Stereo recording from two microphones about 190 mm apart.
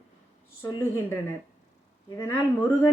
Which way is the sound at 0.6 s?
15° left (ahead or behind).